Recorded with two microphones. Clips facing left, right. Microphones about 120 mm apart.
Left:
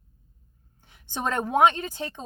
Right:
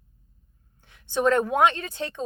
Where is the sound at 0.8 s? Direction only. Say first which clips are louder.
Right 7 dB; 20° left (ahead or behind).